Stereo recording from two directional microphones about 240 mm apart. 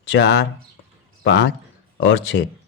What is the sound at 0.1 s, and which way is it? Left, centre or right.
Speech, left.